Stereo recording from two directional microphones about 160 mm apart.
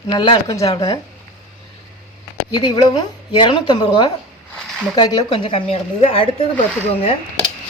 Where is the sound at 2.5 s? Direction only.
25° left (ahead or behind).